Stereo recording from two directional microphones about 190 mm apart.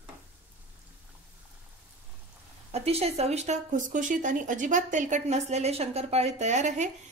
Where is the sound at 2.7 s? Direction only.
30° right (ahead or behind).